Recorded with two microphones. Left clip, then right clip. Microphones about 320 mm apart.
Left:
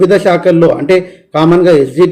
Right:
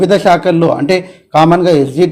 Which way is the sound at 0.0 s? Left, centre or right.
Centre.